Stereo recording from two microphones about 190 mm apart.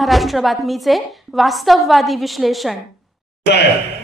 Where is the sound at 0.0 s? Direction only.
Centre (ahead or behind).